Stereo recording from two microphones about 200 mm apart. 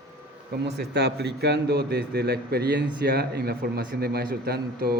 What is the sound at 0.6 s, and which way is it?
A man's voice, 55° right (ahead or behind).